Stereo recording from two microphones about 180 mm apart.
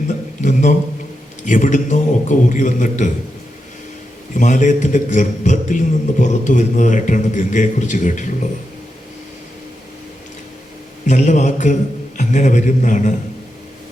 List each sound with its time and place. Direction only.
0.1 s a sound: 40° left (ahead or behind)
1.5 s a man's voice: 45° left (ahead or behind)
4.4 s a man's voice: 45° left (ahead or behind)
11.0 s a man's voice: 40° left (ahead or behind)